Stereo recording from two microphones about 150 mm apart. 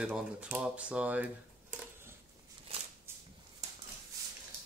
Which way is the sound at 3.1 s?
15° right (ahead or behind).